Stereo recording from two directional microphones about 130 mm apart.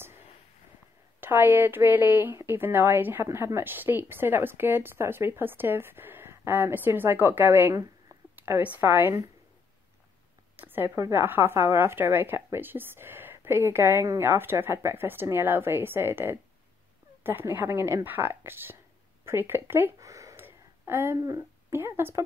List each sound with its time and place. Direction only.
1.2 s speech: 15° right (ahead or behind)
8.4 s a sound: 15° right (ahead or behind)
8.7 s speech: 15° right (ahead or behind)
10.5 s a woman's voice: 15° right (ahead or behind)